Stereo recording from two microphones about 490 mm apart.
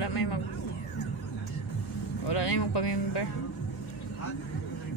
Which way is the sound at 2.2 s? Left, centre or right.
Left.